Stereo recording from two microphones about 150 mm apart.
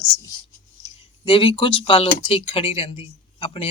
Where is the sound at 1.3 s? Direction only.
35° left (ahead or behind).